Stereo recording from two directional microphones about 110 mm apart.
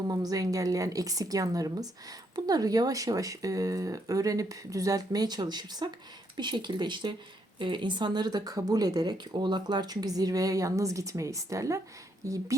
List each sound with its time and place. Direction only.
0.1 s speech: 35° right (ahead or behind)